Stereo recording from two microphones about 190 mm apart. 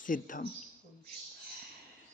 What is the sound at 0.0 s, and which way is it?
Mantra, 45° left (ahead or behind).